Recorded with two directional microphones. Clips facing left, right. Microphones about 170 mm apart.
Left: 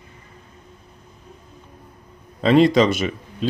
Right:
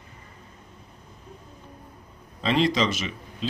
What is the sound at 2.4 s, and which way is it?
Speech, 50° left (ahead or behind).